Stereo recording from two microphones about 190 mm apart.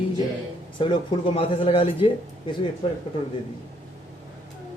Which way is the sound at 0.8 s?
25° left (ahead or behind).